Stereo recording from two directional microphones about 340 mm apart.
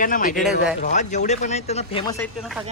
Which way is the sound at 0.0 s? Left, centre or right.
Left.